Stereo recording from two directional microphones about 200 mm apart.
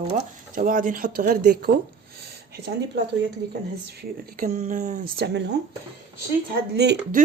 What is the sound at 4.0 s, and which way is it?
Speech, 45° right (ahead or behind).